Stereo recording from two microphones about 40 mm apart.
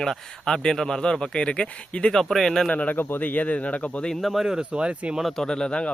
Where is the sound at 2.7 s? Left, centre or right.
Left.